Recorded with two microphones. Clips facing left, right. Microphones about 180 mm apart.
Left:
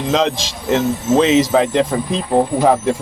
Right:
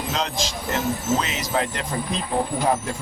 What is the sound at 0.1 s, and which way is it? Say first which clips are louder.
Speech: left 11 dB; 90° left.